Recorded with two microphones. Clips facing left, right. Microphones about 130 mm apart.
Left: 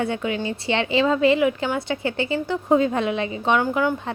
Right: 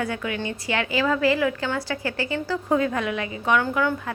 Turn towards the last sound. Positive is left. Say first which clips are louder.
# left 2 dB
turn(degrees=20)  # may be behind; listen again after turning